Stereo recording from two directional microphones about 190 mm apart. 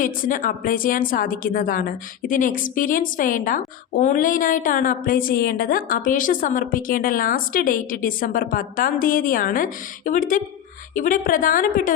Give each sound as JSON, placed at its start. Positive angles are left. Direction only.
{"t": 0.0, "sound": "a woman's voice", "side_deg": 45}